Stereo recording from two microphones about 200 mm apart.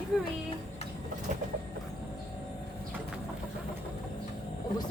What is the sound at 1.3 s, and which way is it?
Train, 40° right (ahead or behind).